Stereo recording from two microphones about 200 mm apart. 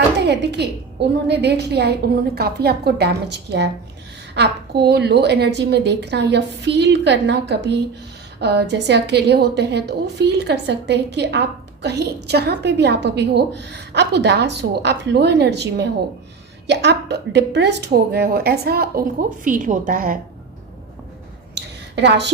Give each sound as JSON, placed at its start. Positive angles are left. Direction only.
{"t": 0.2, "sound": "a woman's voice", "side_deg": -55}
{"t": 21.9, "sound": "a woman's voice", "side_deg": -60}